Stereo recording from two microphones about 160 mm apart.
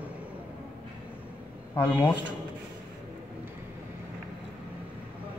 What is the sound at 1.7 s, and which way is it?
Speech, 10° left (ahead or behind).